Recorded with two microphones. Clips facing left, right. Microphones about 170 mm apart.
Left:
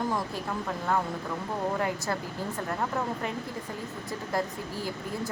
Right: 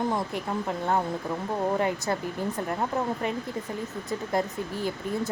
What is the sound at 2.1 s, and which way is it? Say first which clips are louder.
Speech: right 4 dB; 20° right (ahead or behind).